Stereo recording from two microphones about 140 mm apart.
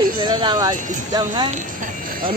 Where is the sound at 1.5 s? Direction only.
80° right.